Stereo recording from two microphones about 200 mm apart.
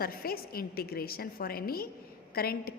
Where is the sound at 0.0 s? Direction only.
50° left (ahead or behind).